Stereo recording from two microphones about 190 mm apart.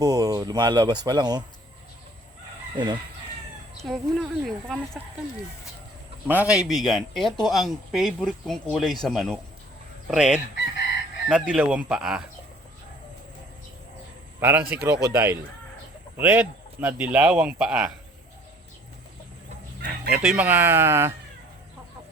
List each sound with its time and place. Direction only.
0.0 s speech: 20° right (ahead or behind)
2.7 s speech: 25° right (ahead or behind)
3.8 s speech: centre (ahead or behind)
6.2 s speech: 5° right (ahead or behind)
14.3 s a man's voice: 15° right (ahead or behind)
19.8 s chicken: 50° right (ahead or behind)
20.2 s speech: 5° right (ahead or behind)